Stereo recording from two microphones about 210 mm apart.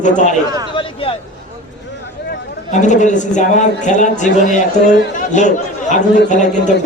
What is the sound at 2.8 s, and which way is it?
A man's voice, 35° left (ahead or behind).